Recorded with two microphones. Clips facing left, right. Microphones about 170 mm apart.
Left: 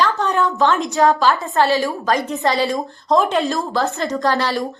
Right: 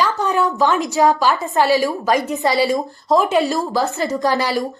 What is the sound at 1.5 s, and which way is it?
Speech, 15° right (ahead or behind).